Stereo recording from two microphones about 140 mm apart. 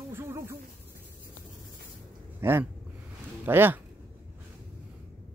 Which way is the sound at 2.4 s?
15° right (ahead or behind).